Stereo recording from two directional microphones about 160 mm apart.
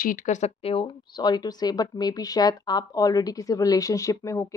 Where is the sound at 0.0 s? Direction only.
55° left (ahead or behind).